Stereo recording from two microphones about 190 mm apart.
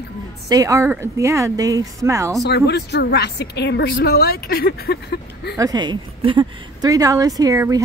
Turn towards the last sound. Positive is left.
turn(degrees=-20)  # may be behind; listen again after turning